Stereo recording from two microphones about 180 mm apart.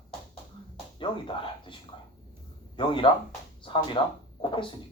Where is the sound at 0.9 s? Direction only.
30° left (ahead or behind).